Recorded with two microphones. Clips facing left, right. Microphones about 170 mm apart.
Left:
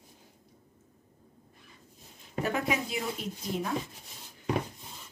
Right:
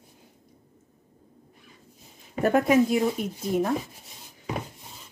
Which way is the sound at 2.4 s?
50° right (ahead or behind).